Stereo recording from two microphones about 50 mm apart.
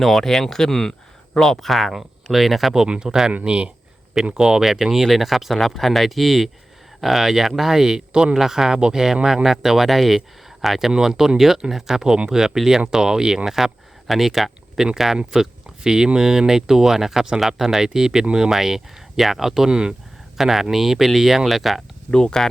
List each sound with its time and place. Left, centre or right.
0.0 s speech: centre
2.8 s speech: centre
4.4 s speech: centre
20.4 s speech: centre
22.1 s speech: centre